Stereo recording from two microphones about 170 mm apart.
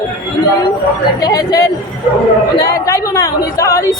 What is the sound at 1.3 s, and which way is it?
Speech, 20° left (ahead or behind).